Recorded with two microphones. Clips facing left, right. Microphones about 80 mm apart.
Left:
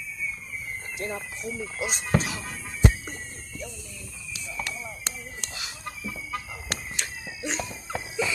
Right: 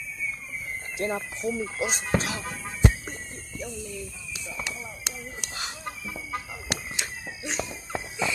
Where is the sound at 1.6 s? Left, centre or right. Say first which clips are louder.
Right 2 dB; right.